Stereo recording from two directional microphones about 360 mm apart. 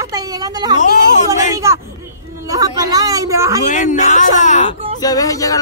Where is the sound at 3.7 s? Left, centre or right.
Left.